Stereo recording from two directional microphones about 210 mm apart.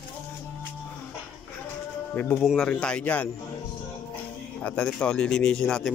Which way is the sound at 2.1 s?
10° left (ahead or behind).